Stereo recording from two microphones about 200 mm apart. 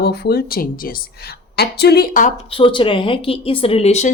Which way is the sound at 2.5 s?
25° left (ahead or behind).